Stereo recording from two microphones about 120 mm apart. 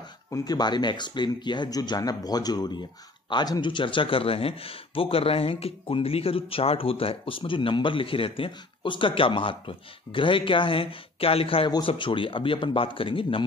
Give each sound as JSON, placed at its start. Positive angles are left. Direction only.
{"t": 0.3, "sound": "speech", "side_deg": 35}